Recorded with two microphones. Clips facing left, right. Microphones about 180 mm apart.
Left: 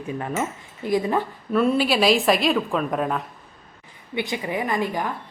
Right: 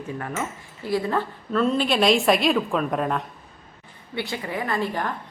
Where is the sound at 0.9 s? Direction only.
15° left (ahead or behind).